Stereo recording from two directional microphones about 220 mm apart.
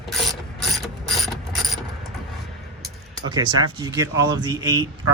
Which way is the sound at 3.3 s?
15° right (ahead or behind).